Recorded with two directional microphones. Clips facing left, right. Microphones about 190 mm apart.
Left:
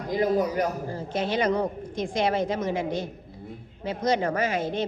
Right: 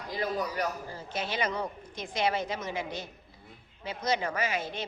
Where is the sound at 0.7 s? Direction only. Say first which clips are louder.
Left 7 dB; 50° left (ahead or behind).